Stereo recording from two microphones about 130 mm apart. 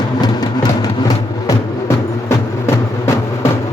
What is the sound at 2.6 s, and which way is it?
Music, 25° left (ahead or behind).